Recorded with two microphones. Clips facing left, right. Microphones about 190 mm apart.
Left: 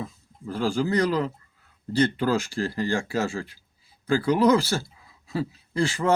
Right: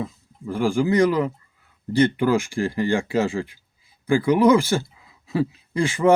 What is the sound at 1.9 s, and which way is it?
Speech, 15° right (ahead or behind).